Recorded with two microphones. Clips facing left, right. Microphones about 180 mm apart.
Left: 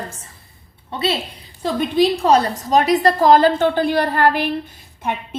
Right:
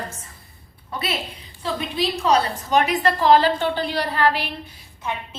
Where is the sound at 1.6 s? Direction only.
45° left (ahead or behind).